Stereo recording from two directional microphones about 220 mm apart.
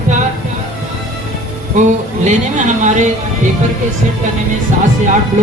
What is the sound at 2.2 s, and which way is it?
Speech, 35° right (ahead or behind).